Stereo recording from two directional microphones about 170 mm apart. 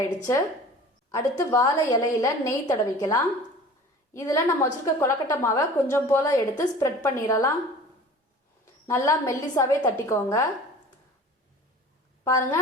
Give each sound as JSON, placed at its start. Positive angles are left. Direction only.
{"t": 0.2, "sound": "a woman's voice", "side_deg": 20}
{"t": 8.9, "sound": "a woman's voice", "side_deg": 15}
{"t": 12.2, "sound": "a woman's voice", "side_deg": 20}